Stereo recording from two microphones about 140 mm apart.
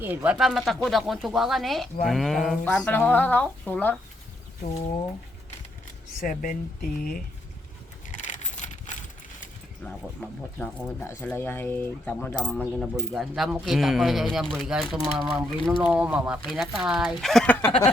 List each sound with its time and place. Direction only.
0.0 s speech: 15° right (ahead or behind)
0.3 s speech: centre (ahead or behind)
6.1 s speech: 70° left (ahead or behind); by 7.2 s 90° left
8.1 s keys jangling: 60° left (ahead or behind)
9.8 s speech: 5° left (ahead or behind)
12.5 s speech: centre (ahead or behind)
17.7 s a sound: 40° left (ahead or behind)